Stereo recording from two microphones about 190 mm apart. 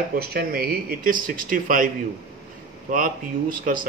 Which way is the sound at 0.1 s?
55° right (ahead or behind).